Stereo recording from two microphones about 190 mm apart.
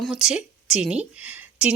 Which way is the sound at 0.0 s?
Centre (ahead or behind).